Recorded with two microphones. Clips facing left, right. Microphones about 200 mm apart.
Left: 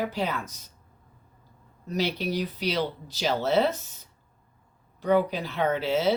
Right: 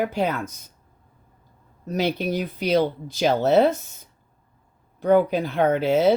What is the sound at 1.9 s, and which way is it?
Speech, 50° right (ahead or behind).